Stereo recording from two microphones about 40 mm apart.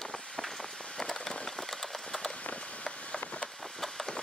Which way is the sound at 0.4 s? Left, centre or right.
Centre.